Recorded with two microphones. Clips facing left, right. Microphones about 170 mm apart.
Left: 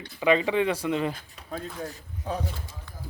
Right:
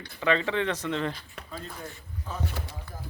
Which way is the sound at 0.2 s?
15° left (ahead or behind).